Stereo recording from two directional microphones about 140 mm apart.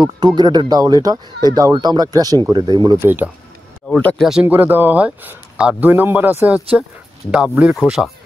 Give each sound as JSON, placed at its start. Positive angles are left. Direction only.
{"t": 0.0, "sound": "speech", "side_deg": -30}
{"t": 3.0, "sound": "speech", "side_deg": -15}
{"t": 3.9, "sound": "speech", "side_deg": 10}
{"t": 4.2, "sound": "speech", "side_deg": -5}